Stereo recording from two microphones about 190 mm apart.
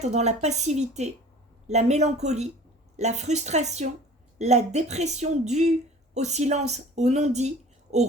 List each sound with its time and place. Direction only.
0.0 s speech: 35° right (ahead or behind)